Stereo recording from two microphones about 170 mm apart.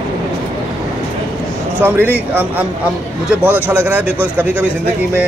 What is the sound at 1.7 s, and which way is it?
Speech, 10° right (ahead or behind).